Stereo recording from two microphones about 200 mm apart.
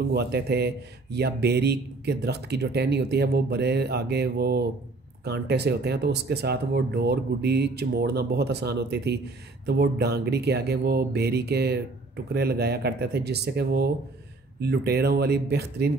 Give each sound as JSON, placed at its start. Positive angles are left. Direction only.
{"t": 0.1, "sound": "speech", "side_deg": -55}